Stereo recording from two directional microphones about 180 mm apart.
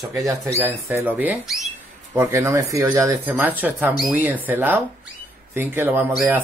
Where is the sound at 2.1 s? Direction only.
15° right (ahead or behind).